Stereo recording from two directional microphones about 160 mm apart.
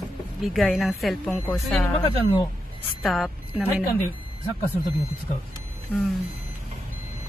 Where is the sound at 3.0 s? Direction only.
Centre (ahead or behind).